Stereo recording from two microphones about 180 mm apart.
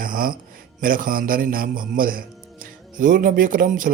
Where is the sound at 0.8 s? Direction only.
50° right (ahead or behind).